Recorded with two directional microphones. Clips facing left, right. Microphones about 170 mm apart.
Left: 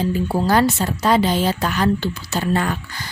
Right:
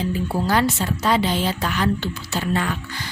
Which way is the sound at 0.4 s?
45° left (ahead or behind).